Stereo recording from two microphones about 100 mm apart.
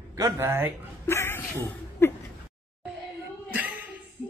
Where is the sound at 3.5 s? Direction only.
15° right (ahead or behind).